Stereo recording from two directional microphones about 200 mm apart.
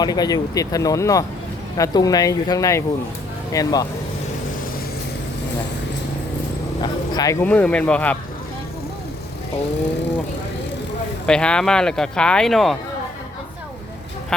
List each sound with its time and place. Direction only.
0.0 s speech: 20° left (ahead or behind)
6.8 s dog: 20° left (ahead or behind)
7.4 s speech: 5° left (ahead or behind)
11.3 s speech: 5° left (ahead or behind)